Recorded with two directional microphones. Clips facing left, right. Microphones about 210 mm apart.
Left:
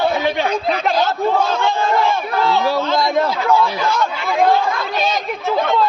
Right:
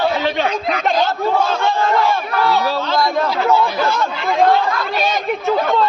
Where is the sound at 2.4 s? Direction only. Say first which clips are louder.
Left 1 dB; 20° left (ahead or behind).